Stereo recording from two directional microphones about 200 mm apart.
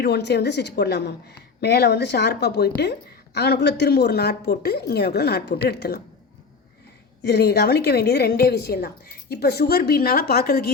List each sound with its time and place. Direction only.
0.0 s a woman's voice: 60° left (ahead or behind)
7.2 s a woman's voice: 55° left (ahead or behind)